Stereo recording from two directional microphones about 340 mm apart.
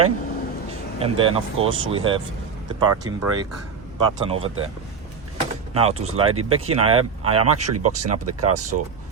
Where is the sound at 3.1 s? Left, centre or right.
Right.